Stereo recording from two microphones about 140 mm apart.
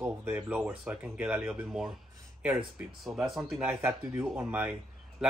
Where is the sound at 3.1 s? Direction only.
Centre (ahead or behind).